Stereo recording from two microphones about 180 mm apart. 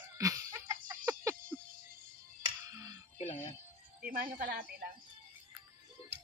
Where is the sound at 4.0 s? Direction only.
50° right (ahead or behind).